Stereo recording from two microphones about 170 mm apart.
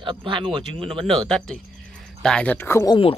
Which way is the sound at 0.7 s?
5° left (ahead or behind).